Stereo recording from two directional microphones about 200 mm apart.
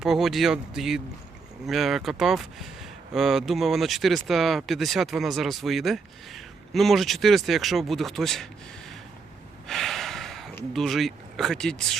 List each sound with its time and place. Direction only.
0.0 s speech: centre (ahead or behind)
9.6 s gasp: centre (ahead or behind)
10.8 s speech: centre (ahead or behind)